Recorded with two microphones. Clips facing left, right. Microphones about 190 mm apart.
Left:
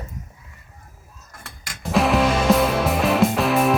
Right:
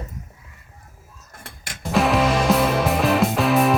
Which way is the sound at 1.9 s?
Centre (ahead or behind).